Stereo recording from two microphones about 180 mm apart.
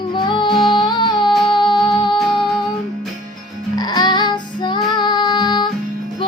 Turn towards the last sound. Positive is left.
turn(degrees=25)  # may be behind; listen again after turning